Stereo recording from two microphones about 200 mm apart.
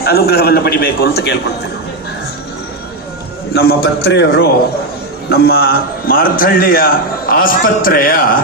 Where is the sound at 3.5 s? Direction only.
55° left (ahead or behind).